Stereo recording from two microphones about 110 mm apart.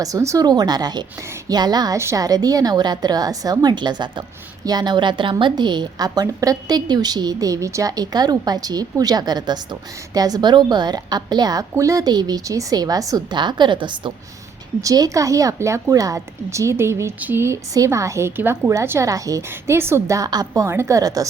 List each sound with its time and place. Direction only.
0.0 s a woman's voice: 30° right (ahead or behind); by 14.1 s 45° right (ahead or behind)
14.8 s a woman's voice: 35° right (ahead or behind)
20.5 s a woman's voice: 25° right (ahead or behind)